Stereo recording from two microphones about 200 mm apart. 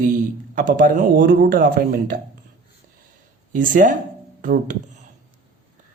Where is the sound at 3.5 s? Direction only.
40° right (ahead or behind).